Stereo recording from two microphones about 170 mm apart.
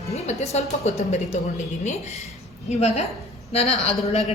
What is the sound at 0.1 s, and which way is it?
A woman's voice, 40° left (ahead or behind).